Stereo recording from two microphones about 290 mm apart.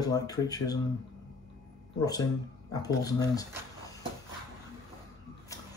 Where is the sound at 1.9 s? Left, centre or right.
Centre.